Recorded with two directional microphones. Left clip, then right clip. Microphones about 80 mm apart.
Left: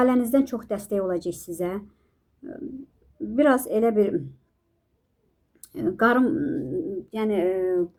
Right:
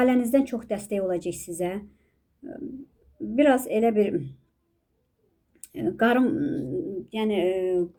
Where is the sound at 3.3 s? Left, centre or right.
Left.